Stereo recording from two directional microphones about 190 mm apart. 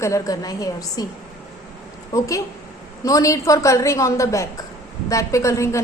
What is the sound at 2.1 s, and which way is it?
A woman's voice, 15° left (ahead or behind).